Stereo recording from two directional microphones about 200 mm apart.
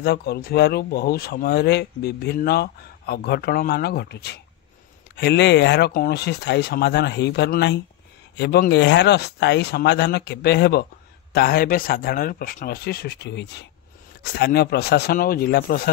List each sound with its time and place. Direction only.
0.0 s speech: 55° left (ahead or behind)